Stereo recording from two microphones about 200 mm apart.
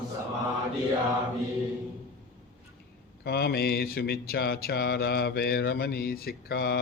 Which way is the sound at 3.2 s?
55° left (ahead or behind).